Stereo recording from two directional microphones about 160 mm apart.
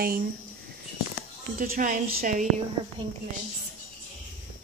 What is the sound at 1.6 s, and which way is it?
Speech, 60° right (ahead or behind).